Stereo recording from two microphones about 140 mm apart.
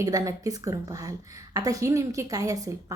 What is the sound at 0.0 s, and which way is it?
A woman's voice, 25° right (ahead or behind).